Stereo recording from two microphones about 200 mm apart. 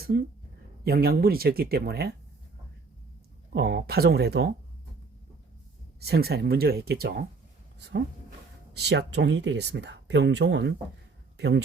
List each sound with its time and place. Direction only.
0.0 s speech: 50° right (ahead or behind)
3.5 s speech: 50° right (ahead or behind)
6.0 s speech: 50° right (ahead or behind)